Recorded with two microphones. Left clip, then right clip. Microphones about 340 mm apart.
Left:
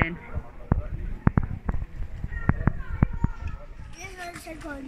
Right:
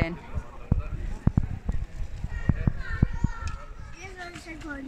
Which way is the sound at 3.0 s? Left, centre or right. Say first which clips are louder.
Left 4 dB; left.